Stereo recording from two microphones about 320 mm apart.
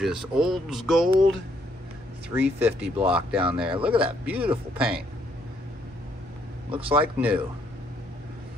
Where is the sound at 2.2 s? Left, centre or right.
Centre.